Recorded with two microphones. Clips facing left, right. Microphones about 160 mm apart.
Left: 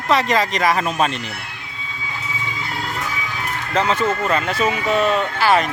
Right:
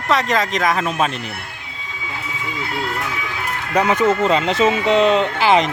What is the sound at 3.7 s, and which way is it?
Speech, 15° right (ahead or behind).